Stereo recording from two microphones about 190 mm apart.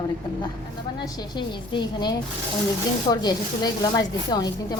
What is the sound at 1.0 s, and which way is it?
Speech, 25° left (ahead or behind).